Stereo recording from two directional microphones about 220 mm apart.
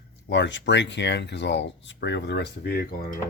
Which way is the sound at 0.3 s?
55° left (ahead or behind).